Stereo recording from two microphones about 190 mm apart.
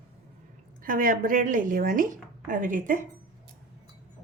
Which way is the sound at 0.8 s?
45° right (ahead or behind).